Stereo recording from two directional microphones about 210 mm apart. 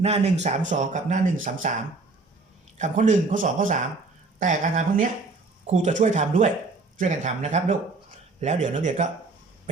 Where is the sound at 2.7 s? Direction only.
35° right (ahead or behind).